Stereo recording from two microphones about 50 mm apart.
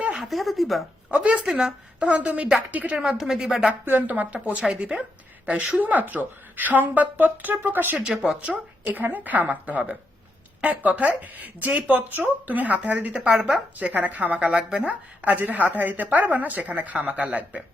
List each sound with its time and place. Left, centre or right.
0.2 s speech: centre
1.1 s a woman's voice: right
2.9 s speech: centre
3.8 s speech: right
4.1 s a woman's voice: right
5.8 s a woman's voice: right
8.0 s a woman's voice: right
8.9 s a woman's voice: right
13.1 s a woman's voice: right
13.7 s a woman's voice: right
14.4 s a woman's voice: right